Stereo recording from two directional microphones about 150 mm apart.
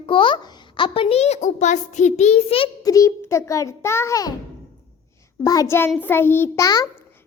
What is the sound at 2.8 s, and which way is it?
A child's voice, 25° left (ahead or behind).